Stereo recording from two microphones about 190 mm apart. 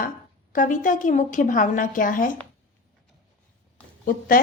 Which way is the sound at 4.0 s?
45° left (ahead or behind).